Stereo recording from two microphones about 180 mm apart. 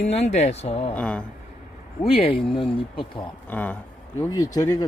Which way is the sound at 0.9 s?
5° left (ahead or behind).